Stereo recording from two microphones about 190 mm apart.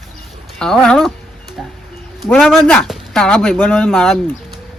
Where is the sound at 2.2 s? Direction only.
Centre (ahead or behind).